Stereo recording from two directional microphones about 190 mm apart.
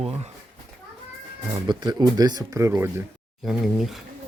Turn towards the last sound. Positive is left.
turn(degrees=0)  # may be behind; listen again after turning